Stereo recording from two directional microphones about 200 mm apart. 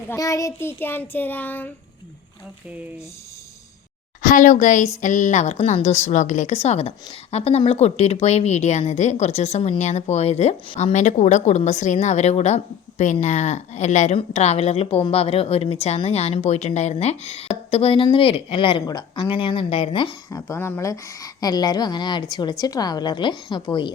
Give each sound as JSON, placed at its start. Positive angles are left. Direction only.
{"t": 0.1, "sound": "a child's voice", "side_deg": 15}
{"t": 4.2, "sound": "speech", "side_deg": 40}